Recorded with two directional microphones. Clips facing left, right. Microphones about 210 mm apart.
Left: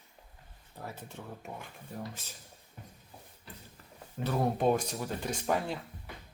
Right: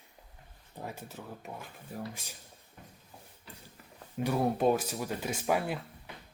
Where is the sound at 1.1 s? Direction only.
Centre (ahead or behind).